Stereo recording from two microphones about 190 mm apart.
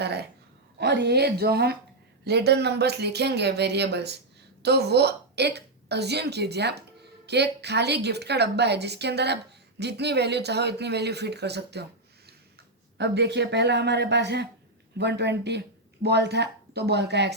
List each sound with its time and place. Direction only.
0.0 s a woman's voice: 60° right (ahead or behind)